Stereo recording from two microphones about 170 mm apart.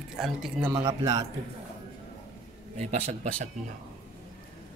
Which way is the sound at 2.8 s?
40° right (ahead or behind).